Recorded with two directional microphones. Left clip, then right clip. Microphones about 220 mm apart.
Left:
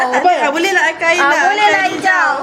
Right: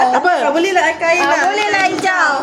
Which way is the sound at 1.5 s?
10° right (ahead or behind).